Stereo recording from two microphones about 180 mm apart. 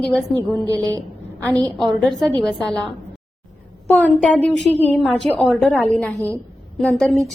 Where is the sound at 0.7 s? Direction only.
20° right (ahead or behind).